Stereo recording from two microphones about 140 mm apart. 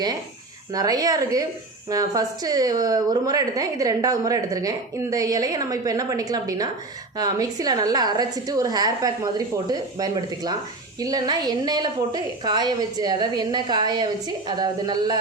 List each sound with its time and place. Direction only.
0.7 s speech: 25° right (ahead or behind)